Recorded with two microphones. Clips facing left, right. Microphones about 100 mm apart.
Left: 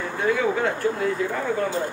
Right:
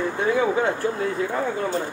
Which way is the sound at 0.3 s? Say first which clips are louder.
Right 1 dB; 25° right (ahead or behind).